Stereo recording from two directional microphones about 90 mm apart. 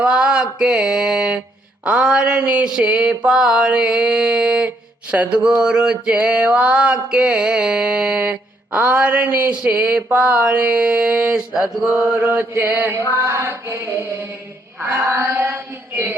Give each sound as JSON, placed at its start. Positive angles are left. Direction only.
{"t": 0.0, "sound": "mantra", "side_deg": -10}
{"t": 12.2, "sound": "chant", "side_deg": -20}